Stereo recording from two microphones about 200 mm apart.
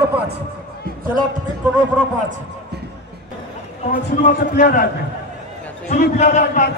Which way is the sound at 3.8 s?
40° left (ahead or behind).